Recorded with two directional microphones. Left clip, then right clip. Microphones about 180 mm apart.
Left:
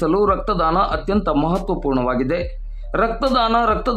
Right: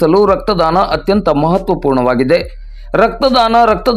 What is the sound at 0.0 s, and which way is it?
A man's voice, 25° right (ahead or behind).